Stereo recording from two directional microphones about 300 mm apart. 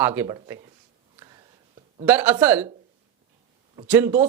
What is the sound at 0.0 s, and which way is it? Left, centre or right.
Speech, centre.